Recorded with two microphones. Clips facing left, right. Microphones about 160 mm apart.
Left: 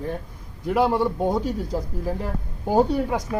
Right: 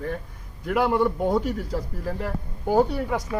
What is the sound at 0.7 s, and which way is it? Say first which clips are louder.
Speech: left 2 dB; 20° left (ahead or behind).